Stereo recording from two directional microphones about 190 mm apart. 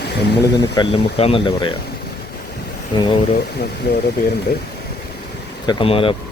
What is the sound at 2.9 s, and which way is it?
Speech, 25° left (ahead or behind).